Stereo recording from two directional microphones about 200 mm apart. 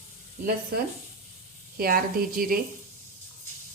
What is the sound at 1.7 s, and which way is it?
Speech, 45° right (ahead or behind).